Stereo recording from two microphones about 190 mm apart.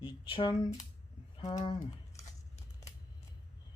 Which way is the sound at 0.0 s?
25° left (ahead or behind).